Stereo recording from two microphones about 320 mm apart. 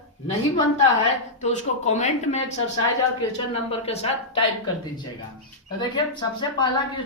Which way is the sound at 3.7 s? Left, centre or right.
Centre.